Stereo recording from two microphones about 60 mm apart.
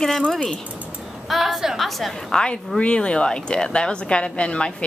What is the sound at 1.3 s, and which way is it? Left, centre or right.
A woman's voice, centre.